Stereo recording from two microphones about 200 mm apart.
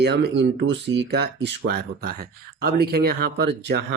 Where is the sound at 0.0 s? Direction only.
60° right (ahead or behind).